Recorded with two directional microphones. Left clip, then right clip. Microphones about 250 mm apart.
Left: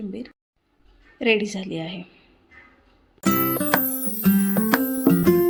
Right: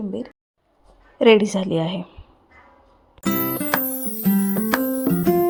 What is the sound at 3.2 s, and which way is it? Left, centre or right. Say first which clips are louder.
Music: left 2 dB; centre.